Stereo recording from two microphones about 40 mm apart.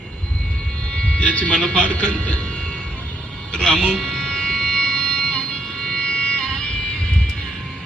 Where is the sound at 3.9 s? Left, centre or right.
Centre.